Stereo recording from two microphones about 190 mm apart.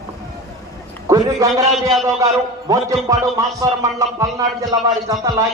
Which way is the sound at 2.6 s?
15° right (ahead or behind).